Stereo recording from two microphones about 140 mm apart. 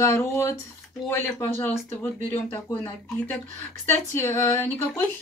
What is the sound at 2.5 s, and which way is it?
Speech, 15° left (ahead or behind).